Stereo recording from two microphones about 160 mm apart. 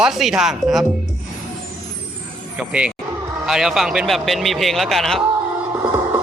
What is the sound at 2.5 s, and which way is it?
Speech, 5° right (ahead or behind).